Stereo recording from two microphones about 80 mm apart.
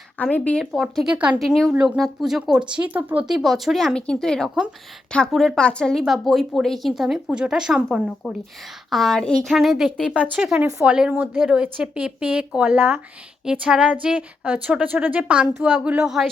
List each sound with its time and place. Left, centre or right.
0.2 s speech: centre
0.6 s a woman's voice: centre
1.1 s speech: centre
1.4 s a woman's voice: centre
3.2 s a woman's voice: centre
8.9 s a woman's voice: centre; by 13.0 s right
13.4 s speech: centre